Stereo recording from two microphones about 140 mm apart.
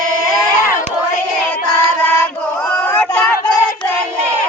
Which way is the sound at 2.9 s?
15° left (ahead or behind).